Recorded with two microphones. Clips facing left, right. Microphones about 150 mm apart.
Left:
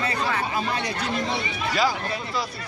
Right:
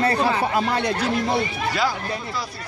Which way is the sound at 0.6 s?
55° right (ahead or behind).